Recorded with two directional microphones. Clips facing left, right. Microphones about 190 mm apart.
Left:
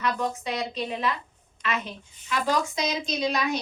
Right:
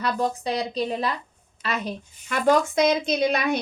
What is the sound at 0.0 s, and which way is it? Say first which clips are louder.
A child's voice: right 3 dB; 35° right (ahead or behind).